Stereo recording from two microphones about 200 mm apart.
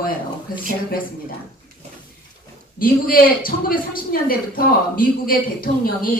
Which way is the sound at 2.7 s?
45° left (ahead or behind).